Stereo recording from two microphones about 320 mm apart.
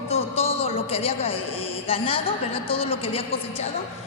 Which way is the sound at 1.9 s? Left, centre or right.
Centre.